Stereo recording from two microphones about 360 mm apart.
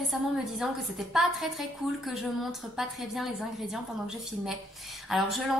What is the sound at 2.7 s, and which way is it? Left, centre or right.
A woman's voice, centre.